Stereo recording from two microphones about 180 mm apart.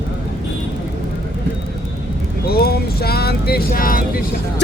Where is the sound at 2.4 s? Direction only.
60° left (ahead or behind).